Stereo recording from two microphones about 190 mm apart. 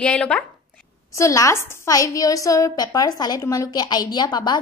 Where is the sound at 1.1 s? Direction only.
15° left (ahead or behind).